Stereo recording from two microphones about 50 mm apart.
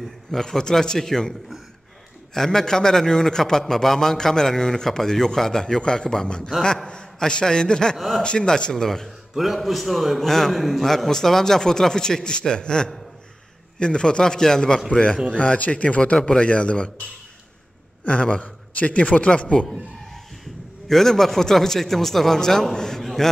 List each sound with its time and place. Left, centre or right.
0.3 s a man's voice: centre
2.3 s a man's voice: centre
9.4 s a man's voice: centre; by 16.9 s left
18.0 s a man's voice: left
20.9 s a man's voice: centre
23.0 s a sound: centre